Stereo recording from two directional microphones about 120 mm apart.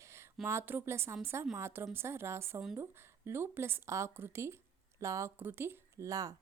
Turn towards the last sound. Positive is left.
turn(degrees=-30)  # may be behind; listen again after turning